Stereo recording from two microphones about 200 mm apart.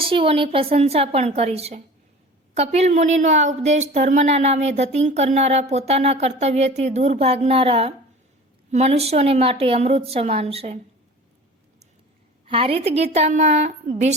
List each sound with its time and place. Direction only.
0.0 s a woman's voice: 25° right (ahead or behind)
12.5 s a woman's voice: 30° right (ahead or behind)